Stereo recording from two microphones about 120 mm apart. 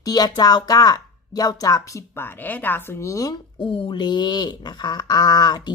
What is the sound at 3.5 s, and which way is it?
Speech, 45° left (ahead or behind).